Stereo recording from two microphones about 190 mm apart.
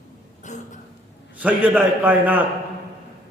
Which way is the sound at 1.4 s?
10° right (ahead or behind).